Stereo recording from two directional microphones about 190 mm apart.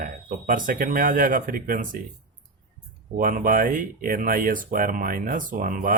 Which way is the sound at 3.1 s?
45° right (ahead or behind).